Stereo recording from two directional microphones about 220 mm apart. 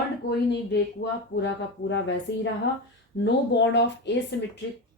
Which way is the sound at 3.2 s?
50° left (ahead or behind).